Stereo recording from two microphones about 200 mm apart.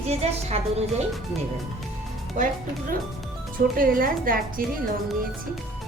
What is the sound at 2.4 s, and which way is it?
Speech, 40° right (ahead or behind).